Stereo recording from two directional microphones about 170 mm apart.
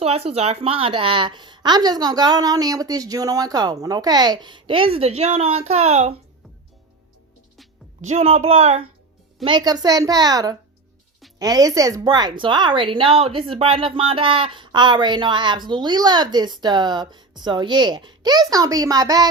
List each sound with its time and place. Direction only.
0.0 s a woman's voice: 35° right (ahead or behind)
8.0 s a woman's voice: 40° right (ahead or behind)
9.4 s a woman's voice: 25° right (ahead or behind)